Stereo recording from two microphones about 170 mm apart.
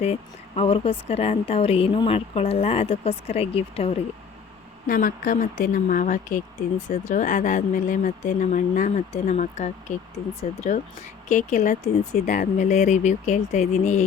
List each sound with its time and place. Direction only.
0.0 s a woman's voice: 35° left (ahead or behind)
4.9 s speech: 55° left (ahead or behind)